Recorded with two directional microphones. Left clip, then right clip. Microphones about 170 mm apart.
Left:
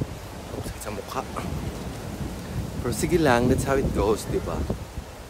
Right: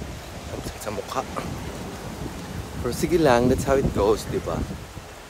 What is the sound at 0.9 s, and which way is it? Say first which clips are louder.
Speech: right 4 dB; 15° left (ahead or behind).